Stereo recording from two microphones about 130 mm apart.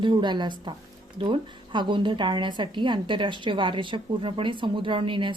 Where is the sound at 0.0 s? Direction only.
35° right (ahead or behind).